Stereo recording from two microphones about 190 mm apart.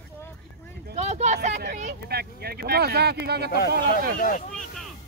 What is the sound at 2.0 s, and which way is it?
Speech, 55° right (ahead or behind).